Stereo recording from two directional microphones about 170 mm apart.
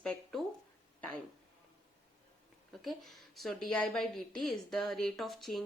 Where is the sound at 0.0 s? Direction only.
5° left (ahead or behind).